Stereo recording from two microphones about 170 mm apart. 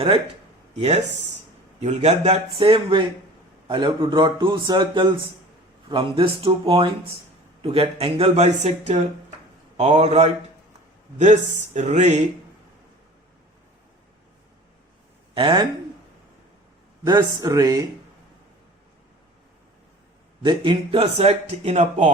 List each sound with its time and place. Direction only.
0.8 s a man's voice: 40° right (ahead or behind)
15.4 s a man's voice: 30° right (ahead or behind)
17.1 s a man's voice: 20° right (ahead or behind)
20.4 s speech: 30° right (ahead or behind)